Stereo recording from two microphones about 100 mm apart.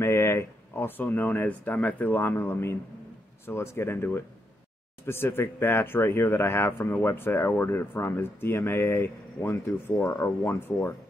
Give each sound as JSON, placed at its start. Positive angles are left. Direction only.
{"t": 0.0, "sound": "speech", "side_deg": 25}